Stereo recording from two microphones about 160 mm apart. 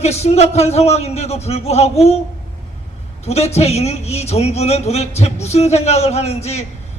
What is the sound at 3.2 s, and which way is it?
A man's voice, 40° left (ahead or behind).